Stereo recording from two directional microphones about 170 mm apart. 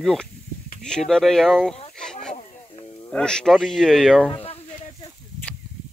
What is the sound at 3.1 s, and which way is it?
Speech, 5° left (ahead or behind).